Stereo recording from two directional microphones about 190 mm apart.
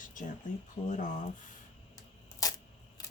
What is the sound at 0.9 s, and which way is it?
Speech, 40° left (ahead or behind).